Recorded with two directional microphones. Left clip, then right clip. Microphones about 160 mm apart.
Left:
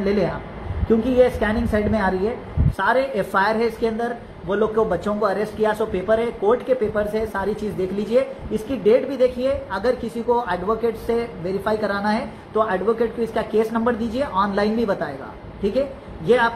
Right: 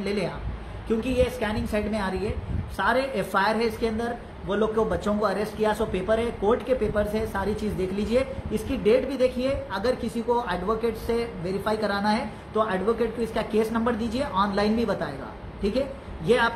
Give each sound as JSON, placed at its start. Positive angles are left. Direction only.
{"t": 0.0, "sound": "a man's voice", "side_deg": -15}
{"t": 16.3, "sound": "a man's voice", "side_deg": -20}